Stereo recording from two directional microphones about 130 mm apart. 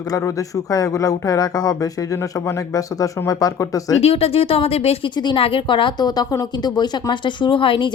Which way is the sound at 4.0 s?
50° left (ahead or behind).